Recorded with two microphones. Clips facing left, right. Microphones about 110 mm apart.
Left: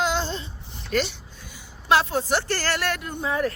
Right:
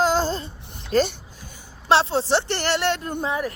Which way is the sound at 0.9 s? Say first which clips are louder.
Right 5 dB; 35° right (ahead or behind).